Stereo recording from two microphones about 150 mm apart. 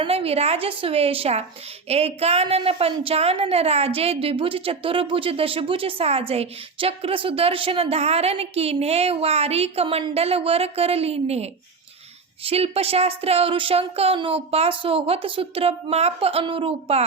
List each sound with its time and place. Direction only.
0.0 s a woman's voice: 40° right (ahead or behind)